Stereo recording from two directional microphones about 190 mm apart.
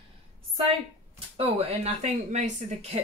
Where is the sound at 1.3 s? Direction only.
30° right (ahead or behind).